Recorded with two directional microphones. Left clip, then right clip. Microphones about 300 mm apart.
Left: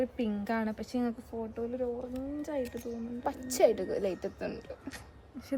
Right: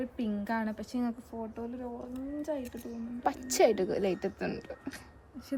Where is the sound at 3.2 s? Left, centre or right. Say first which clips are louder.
Right 1 dB; right.